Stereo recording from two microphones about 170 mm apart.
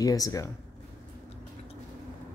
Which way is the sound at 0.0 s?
20° left (ahead or behind).